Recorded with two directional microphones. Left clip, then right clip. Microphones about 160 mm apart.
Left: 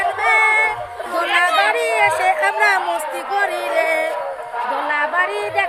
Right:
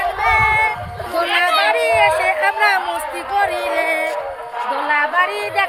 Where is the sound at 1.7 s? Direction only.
25° left (ahead or behind).